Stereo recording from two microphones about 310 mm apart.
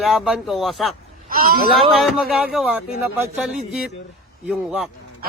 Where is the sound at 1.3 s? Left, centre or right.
Right.